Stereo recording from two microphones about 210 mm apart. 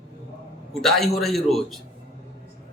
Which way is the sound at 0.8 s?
Centre (ahead or behind).